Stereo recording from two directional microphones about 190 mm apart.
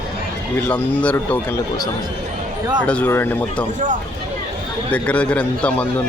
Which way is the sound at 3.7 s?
40° right (ahead or behind).